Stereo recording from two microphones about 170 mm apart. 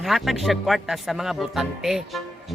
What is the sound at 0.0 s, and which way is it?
Speech, centre (ahead or behind).